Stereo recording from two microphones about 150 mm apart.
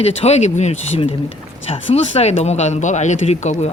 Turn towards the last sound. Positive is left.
turn(degrees=50)  # may be behind; listen again after turning